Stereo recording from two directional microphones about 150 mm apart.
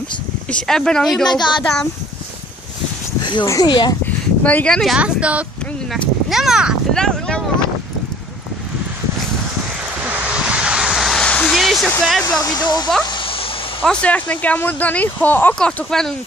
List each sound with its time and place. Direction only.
0.5 s speech: 5° left (ahead or behind)
3.4 s speech: 25° left (ahead or behind)
4.0 s a sound: 10° left (ahead or behind)
4.9 s speech: 10° right (ahead or behind)
10.0 s vehicle: 10° right (ahead or behind)
12.0 s speech: 5° left (ahead or behind)
12.4 s speech: 25° left (ahead or behind)
13.0 s a sound: 30° left (ahead or behind)
13.8 s speech: 10° left (ahead or behind)